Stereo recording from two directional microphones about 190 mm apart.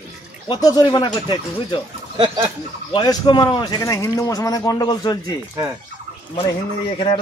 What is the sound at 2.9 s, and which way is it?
A man's voice, 25° left (ahead or behind).